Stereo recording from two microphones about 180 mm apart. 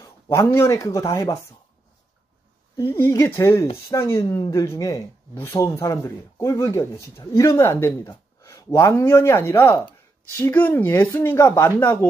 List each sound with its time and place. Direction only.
0.0 s speech: 15° left (ahead or behind)
2.8 s speech: 30° left (ahead or behind)
3.2 s speech: 15° left (ahead or behind)